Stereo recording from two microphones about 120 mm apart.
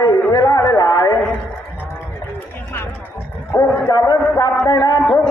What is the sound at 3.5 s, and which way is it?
A man's voice, 30° left (ahead or behind).